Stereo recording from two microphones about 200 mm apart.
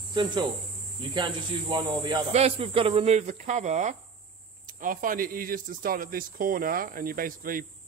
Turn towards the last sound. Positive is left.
turn(degrees=-45)  # may be behind; listen again after turning